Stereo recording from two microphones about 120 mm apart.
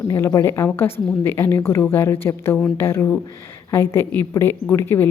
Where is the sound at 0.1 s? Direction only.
25° left (ahead or behind).